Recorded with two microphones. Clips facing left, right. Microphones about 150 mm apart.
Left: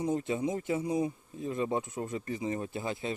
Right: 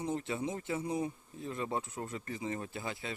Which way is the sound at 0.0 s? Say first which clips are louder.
Left 5 dB; 15° left (ahead or behind).